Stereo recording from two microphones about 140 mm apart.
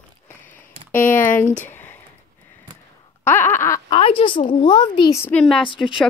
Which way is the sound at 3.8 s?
40° left (ahead or behind).